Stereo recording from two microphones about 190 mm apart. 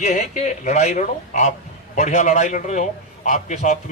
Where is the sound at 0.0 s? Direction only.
40° left (ahead or behind).